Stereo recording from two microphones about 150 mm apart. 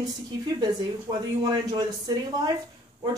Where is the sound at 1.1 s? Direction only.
30° right (ahead or behind).